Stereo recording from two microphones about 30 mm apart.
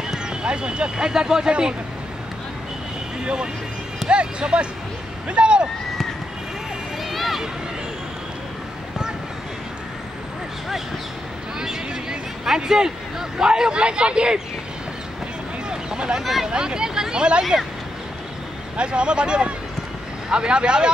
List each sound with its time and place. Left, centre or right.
0.0 s speech: right
4.1 s speech: right
7.1 s a sound: centre
11.6 s a sound: right
13.4 s speech: right
15.7 s a sound: right
16.2 s speech: centre
16.4 s speech: right
18.8 s speech: right